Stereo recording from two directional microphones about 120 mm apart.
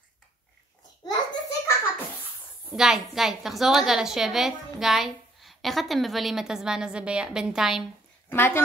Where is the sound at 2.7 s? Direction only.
5° right (ahead or behind).